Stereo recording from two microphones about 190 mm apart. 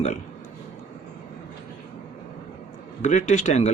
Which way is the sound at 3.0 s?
40° left (ahead or behind).